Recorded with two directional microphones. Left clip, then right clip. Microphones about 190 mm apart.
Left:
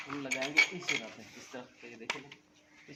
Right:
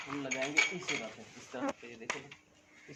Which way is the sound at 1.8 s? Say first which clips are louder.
Left 1 dB; 15° right (ahead or behind).